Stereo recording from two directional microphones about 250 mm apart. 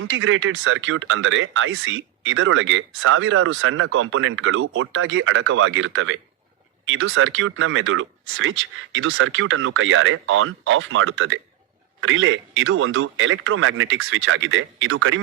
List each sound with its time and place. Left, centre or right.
0.0 s speech: right